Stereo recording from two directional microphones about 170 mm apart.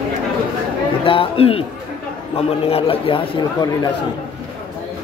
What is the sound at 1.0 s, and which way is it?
Speech, 35° left (ahead or behind).